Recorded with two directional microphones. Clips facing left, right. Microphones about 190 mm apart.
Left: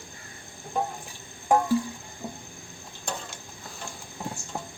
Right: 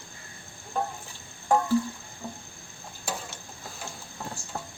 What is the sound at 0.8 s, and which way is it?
Water, 15° left (ahead or behind).